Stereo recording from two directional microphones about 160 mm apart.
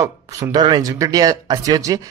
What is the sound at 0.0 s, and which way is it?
Speech, 25° right (ahead or behind).